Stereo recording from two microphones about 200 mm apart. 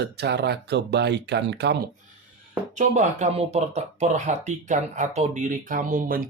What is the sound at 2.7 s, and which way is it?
Speech, 35° right (ahead or behind).